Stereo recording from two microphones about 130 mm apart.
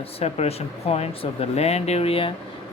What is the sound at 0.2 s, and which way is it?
Speech, 50° left (ahead or behind).